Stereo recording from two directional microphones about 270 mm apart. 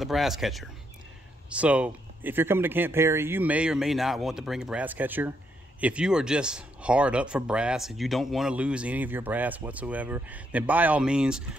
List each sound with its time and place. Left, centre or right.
0.0 s speech: centre